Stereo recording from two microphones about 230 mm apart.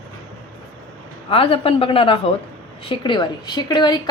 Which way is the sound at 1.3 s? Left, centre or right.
Left.